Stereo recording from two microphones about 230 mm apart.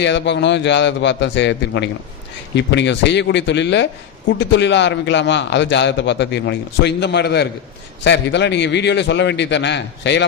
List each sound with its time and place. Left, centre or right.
0.0 s a man's voice: left